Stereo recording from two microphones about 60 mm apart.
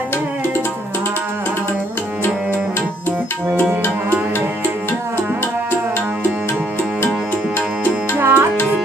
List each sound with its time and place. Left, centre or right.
8.2 s music: right